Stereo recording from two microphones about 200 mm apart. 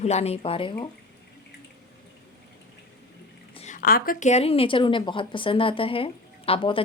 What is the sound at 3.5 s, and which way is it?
A woman's voice, 35° left (ahead or behind).